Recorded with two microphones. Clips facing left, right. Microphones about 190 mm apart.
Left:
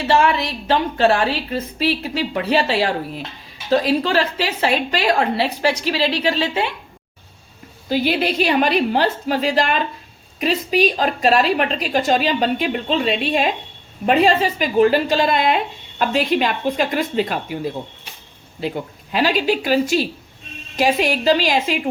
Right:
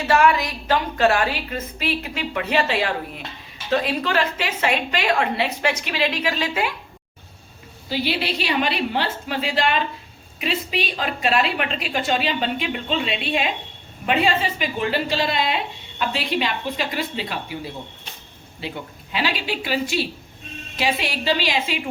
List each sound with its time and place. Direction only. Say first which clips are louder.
0.1 s a woman's voice: left 1 dB; 30° left (ahead or behind)
7.9 s a woman's voice: left 5 dB; 50° left (ahead or behind)